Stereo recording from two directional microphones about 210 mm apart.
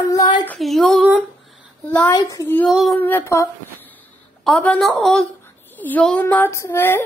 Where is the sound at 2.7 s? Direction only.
Centre (ahead or behind).